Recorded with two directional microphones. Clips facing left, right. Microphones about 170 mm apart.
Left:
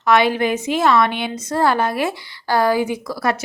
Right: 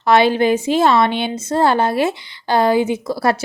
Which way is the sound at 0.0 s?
30° right (ahead or behind).